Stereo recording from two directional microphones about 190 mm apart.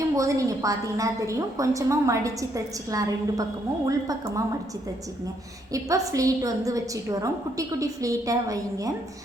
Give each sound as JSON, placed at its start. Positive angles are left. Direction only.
{"t": 0.2, "sound": "a woman's voice", "side_deg": -15}
{"t": 5.7, "sound": "a woman's voice", "side_deg": -15}